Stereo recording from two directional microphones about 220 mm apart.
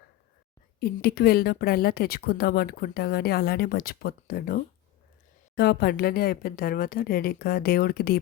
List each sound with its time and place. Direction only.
0.8 s speech: 45° left (ahead or behind)